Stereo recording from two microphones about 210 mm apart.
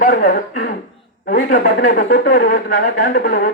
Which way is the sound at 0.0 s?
40° left (ahead or behind).